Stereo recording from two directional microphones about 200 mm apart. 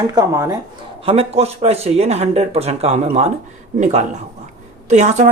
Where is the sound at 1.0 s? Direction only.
30° right (ahead or behind).